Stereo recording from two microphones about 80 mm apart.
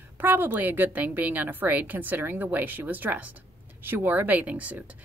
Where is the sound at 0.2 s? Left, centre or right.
Right.